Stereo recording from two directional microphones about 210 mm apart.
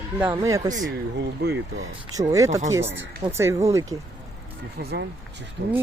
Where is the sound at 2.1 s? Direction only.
15° right (ahead or behind).